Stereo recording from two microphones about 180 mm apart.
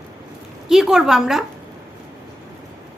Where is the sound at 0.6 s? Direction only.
Centre (ahead or behind).